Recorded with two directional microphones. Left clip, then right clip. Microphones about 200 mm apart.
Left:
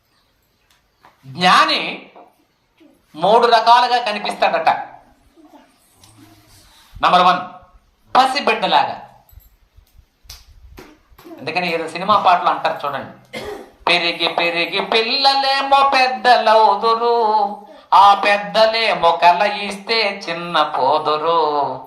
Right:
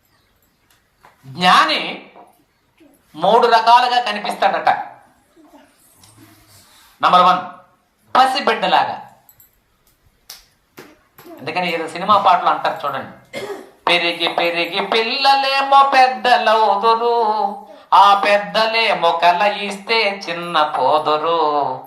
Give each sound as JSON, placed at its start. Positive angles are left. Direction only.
{"t": 1.3, "sound": "music", "side_deg": 15}
{"t": 3.2, "sound": "music", "side_deg": 15}
{"t": 7.0, "sound": "music", "side_deg": 15}
{"t": 11.4, "sound": "music", "side_deg": 15}